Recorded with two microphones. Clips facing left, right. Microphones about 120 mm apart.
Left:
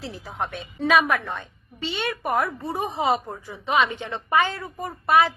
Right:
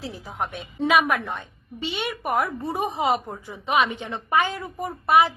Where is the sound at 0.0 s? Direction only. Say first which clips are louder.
Even; 10° right (ahead or behind).